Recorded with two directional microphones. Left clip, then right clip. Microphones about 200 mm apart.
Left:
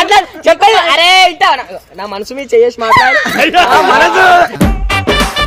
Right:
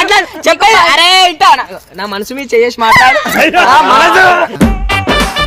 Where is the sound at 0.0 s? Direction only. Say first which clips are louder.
Left 1 dB; 60° right (ahead or behind).